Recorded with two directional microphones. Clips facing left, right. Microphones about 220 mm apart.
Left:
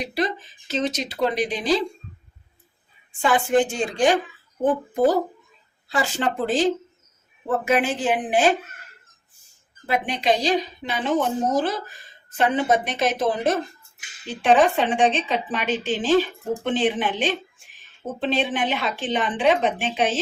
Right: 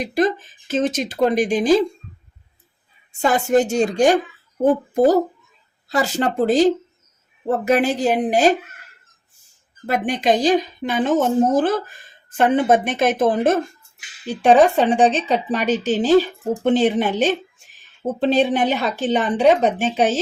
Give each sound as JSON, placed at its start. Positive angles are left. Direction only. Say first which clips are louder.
{"t": 0.1, "sound": "a woman's voice", "louder": "right 6 dB", "side_deg": -45}
{"t": 3.2, "sound": "a woman's voice", "louder": "right 3 dB", "side_deg": -40}
{"t": 5.9, "sound": "a woman's voice", "louder": "right 4 dB", "side_deg": -40}
{"t": 9.8, "sound": "a woman's voice", "louder": "right 3 dB", "side_deg": -45}